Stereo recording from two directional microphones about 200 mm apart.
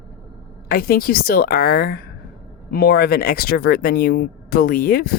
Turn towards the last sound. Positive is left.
turn(degrees=50)  # may be behind; listen again after turning